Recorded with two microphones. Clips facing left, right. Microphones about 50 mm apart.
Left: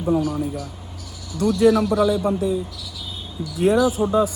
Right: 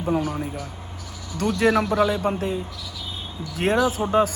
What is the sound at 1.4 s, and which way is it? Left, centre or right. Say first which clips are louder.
A man's voice: left 4 dB; right.